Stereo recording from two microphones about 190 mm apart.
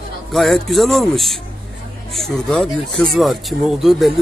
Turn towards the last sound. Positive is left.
turn(degrees=0)  # may be behind; listen again after turning